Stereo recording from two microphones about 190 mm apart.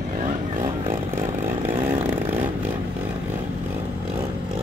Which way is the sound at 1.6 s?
10° right (ahead or behind).